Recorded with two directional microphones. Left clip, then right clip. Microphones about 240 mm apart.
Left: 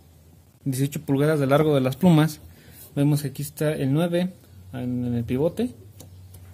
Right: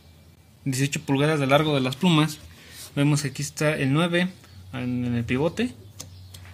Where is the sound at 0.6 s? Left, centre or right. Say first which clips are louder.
Right 1 dB; centre.